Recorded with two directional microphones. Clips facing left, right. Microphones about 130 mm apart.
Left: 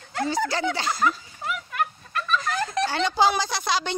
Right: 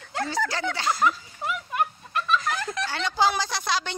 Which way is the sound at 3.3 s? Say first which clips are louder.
Left 2 dB; 10° left (ahead or behind).